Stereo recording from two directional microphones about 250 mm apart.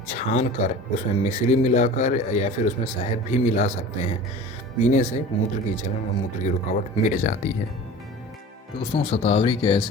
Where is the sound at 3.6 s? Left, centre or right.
Left.